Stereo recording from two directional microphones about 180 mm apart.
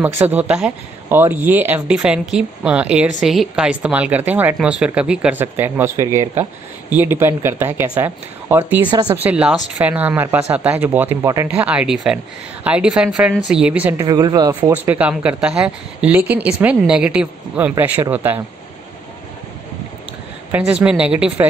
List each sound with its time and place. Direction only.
0.0 s speech: 10° right (ahead or behind)
8.8 s speech: 20° right (ahead or behind)
9.2 s speech: 5° right (ahead or behind)
13.9 s speech: 20° right (ahead or behind)
14.7 s speech: 10° right (ahead or behind)
20.5 s speech: 5° right (ahead or behind)